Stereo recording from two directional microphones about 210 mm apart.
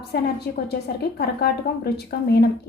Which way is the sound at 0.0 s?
50° left (ahead or behind).